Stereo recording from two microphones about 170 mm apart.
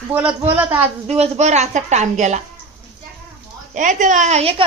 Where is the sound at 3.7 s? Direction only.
50° right (ahead or behind).